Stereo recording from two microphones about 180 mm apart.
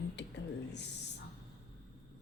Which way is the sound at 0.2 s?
70° left (ahead or behind).